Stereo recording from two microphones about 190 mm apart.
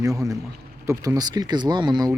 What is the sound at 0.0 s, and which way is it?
Speech, 15° right (ahead or behind).